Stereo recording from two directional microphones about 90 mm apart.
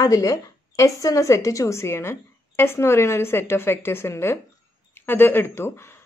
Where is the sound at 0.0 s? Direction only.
40° left (ahead or behind).